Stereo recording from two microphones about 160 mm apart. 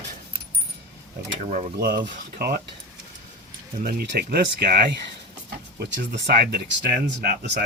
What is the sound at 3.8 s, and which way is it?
Speech, 70° right (ahead or behind).